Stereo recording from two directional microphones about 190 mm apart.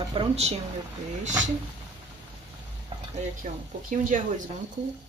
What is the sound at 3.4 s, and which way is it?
Dishes, 40° right (ahead or behind).